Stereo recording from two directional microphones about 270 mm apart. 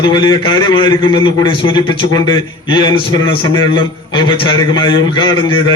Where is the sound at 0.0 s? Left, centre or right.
Centre.